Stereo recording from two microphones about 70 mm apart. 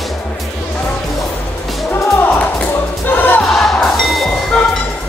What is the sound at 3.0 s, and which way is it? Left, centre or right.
Music, left.